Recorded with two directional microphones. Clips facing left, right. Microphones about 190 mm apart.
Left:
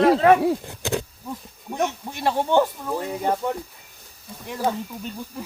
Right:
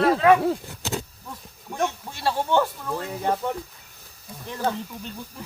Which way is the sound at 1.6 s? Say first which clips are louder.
Left 2 dB; 20° left (ahead or behind).